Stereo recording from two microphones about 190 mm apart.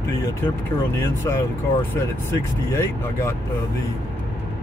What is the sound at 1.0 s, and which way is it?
Speech, 15° left (ahead or behind).